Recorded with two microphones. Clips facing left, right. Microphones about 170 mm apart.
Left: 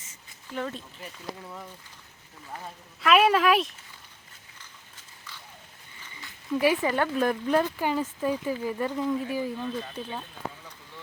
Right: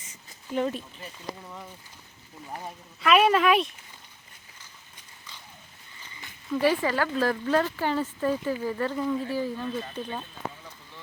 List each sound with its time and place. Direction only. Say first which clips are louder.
0.1 s a sound: right 6 dB; 20° right (ahead or behind)
1.0 s speech: even; centre (ahead or behind)
3.0 s speech: even; centre (ahead or behind)
6.5 s speech: even; 15° left (ahead or behind)
9.6 s speech: right 1 dB; 5° left (ahead or behind)